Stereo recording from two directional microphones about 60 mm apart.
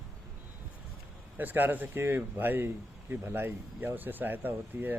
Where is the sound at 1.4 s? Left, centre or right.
Right.